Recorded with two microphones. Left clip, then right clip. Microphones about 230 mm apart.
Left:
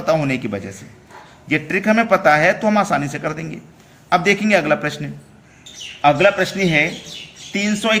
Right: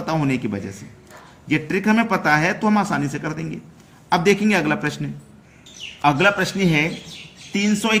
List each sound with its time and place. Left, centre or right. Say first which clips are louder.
0.0 s a man's voice: left 5 dB; centre